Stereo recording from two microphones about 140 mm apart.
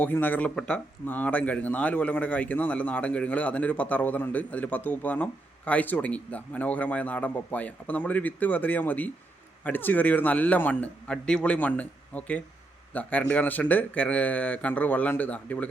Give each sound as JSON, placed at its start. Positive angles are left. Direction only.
{"t": 0.0, "sound": "speech", "side_deg": 15}